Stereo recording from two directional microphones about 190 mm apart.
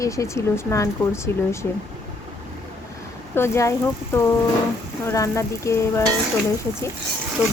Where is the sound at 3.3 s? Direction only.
15° left (ahead or behind).